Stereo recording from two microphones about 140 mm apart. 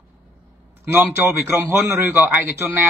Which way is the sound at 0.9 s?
15° right (ahead or behind).